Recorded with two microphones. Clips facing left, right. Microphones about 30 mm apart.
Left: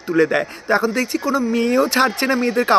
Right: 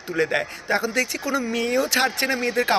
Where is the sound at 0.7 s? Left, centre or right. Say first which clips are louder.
Left 6 dB; left.